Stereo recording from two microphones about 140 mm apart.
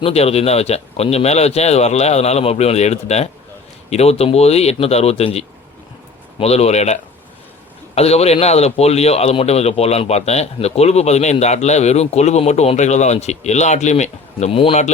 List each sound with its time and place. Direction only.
0.0 s a man's voice: 45° left (ahead or behind)